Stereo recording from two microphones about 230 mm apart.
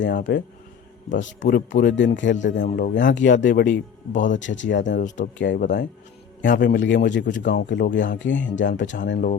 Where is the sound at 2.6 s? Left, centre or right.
Left.